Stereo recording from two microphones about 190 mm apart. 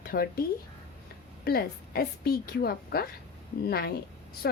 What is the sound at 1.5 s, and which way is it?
A woman's voice, 55° left (ahead or behind).